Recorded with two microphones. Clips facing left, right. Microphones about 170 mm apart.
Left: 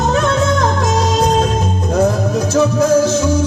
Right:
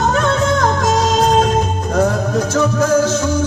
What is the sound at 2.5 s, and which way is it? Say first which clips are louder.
Music: left 3 dB; 10° left (ahead or behind).